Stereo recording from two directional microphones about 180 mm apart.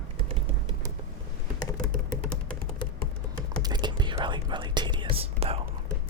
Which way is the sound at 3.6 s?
25° right (ahead or behind).